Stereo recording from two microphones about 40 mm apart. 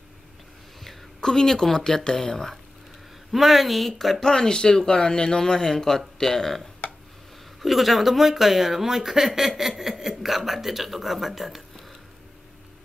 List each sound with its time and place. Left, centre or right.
1.2 s speech: centre
3.3 s speech: centre
4.2 s speech: centre
7.6 s speech: centre